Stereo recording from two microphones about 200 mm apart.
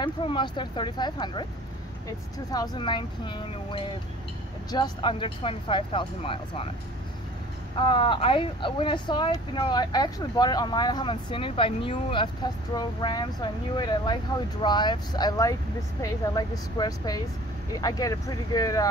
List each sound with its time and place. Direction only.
0.0 s speech: 25° left (ahead or behind)
7.8 s speech: 25° left (ahead or behind)